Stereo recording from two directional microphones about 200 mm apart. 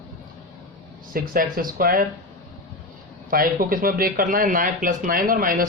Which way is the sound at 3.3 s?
45° right (ahead or behind).